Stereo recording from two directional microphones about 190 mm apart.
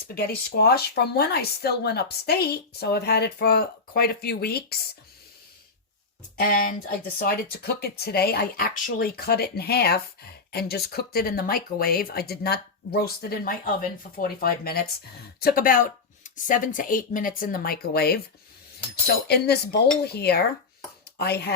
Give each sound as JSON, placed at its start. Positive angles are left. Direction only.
{"t": 0.1, "sound": "speech", "side_deg": 55}
{"t": 6.3, "sound": "speech", "side_deg": 50}